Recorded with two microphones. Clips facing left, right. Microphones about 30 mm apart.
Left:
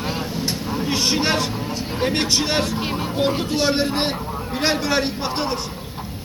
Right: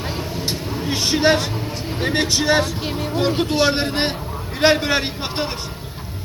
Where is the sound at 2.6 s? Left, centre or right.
Centre.